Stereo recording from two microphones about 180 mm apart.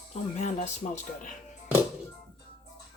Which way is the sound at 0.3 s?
40° left (ahead or behind).